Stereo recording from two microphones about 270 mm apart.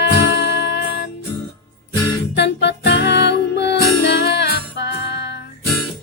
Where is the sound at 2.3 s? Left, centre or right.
Left.